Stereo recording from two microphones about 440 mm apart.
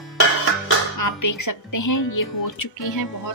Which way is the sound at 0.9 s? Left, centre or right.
Left.